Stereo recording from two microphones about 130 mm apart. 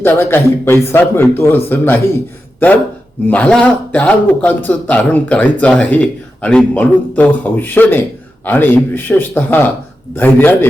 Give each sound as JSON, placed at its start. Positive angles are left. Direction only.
{"t": 0.0, "sound": "a man's voice", "side_deg": 15}